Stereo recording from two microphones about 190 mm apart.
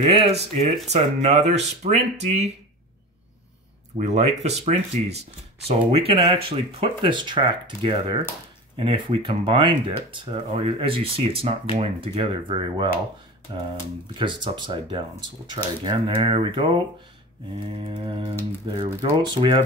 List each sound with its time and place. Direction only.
0.1 s speech: 30° right (ahead or behind)
4.0 s speech: 35° right (ahead or behind)
17.8 s speech: 25° right (ahead or behind)